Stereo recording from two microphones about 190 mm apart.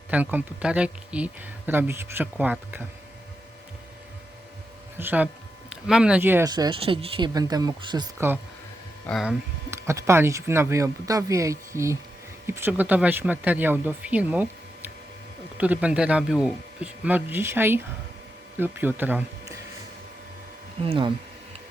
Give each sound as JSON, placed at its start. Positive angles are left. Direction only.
{"t": 0.1, "sound": "speech", "side_deg": -10}
{"t": 4.9, "sound": "speech", "side_deg": -10}
{"t": 6.5, "sound": "speech", "side_deg": -25}
{"t": 9.0, "sound": "speech", "side_deg": 0}
{"t": 9.6, "sound": "speech", "side_deg": -15}
{"t": 15.5, "sound": "speech", "side_deg": -5}
{"t": 20.8, "sound": "speech", "side_deg": -30}